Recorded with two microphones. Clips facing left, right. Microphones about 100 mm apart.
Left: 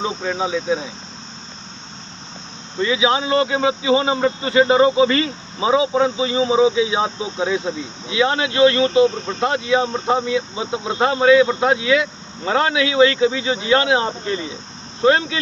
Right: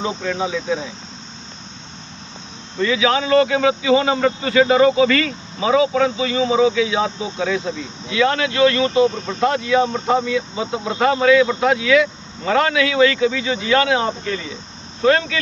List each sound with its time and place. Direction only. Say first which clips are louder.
0.0 s speech: even; 20° left (ahead or behind)
2.8 s speech: even; 20° left (ahead or behind)